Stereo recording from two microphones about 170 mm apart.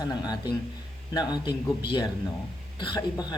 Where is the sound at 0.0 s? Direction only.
25° left (ahead or behind).